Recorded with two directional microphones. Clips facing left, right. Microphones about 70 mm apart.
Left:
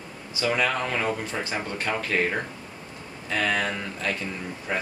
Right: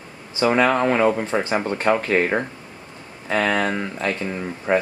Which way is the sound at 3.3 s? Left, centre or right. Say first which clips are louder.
Right 5 dB; right.